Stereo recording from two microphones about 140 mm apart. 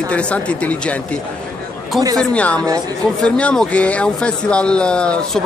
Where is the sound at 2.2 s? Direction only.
10° left (ahead or behind).